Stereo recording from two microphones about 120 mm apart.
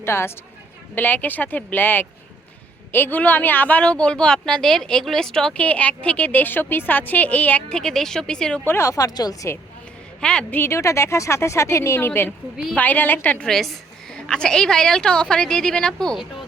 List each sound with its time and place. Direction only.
0.0 s speech: 20° left (ahead or behind); by 8.6 s 5° left (ahead or behind)
8.6 s speech: 20° left (ahead or behind)
10.2 s speech: 10° left (ahead or behind)